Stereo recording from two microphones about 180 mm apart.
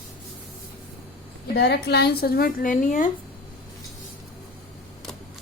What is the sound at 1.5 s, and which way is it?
Speech, 65° left (ahead or behind).